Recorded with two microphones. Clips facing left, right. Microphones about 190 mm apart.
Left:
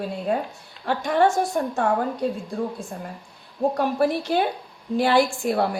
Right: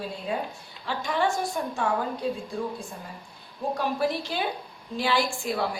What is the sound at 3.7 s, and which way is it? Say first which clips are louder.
A woman's voice: left 3 dB; 55° left (ahead or behind).